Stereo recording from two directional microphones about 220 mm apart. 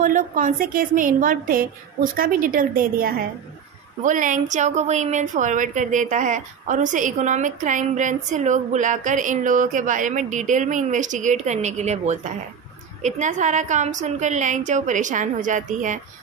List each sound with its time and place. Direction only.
0.0 s a woman's voice: 35° right (ahead or behind)